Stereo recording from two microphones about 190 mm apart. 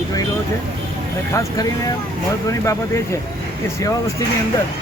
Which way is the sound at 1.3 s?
15° left (ahead or behind).